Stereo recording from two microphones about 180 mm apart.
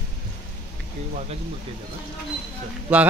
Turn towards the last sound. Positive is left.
turn(degrees=-10)  # may be behind; listen again after turning